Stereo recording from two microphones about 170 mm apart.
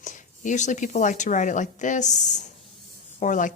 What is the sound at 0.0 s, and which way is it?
A woman's voice, 45° left (ahead or behind).